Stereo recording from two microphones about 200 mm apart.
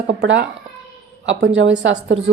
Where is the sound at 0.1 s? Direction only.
60° right (ahead or behind).